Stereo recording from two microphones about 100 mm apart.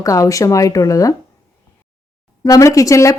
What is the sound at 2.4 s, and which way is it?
Speech, 35° left (ahead or behind).